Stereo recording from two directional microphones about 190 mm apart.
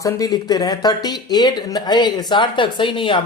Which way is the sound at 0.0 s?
15° left (ahead or behind).